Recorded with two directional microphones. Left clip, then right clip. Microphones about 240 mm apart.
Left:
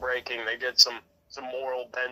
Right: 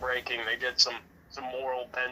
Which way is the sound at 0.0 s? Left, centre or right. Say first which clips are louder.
Left 1 dB; left.